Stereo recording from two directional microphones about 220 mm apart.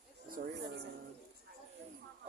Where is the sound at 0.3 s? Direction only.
40° right (ahead or behind).